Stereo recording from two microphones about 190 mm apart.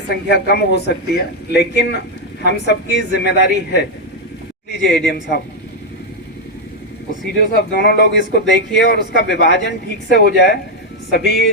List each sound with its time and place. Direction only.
0.3 s speech: 60° left (ahead or behind)
4.9 s speech: 55° left (ahead or behind)
7.5 s speech: 55° left (ahead or behind)